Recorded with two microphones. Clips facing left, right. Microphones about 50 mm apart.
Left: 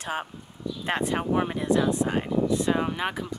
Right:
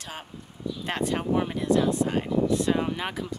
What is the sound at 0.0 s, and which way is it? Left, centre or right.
Speech, left.